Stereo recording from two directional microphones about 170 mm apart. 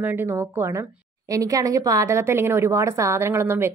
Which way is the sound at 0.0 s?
15° right (ahead or behind).